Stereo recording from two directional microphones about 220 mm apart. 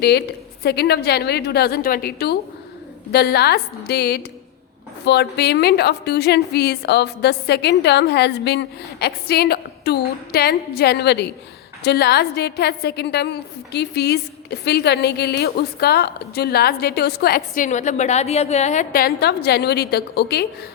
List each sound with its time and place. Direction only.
0.0 s a woman's voice: 45° left (ahead or behind)